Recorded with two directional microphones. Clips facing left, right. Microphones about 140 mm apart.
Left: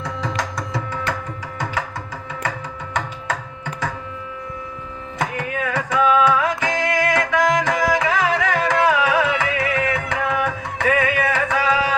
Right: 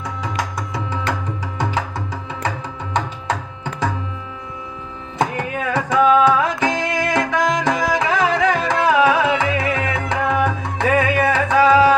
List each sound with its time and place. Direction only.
0.0 s music: 10° right (ahead or behind)
5.1 s music: 30° right (ahead or behind)